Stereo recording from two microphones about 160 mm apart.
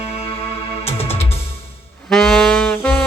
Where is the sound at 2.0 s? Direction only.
5° left (ahead or behind).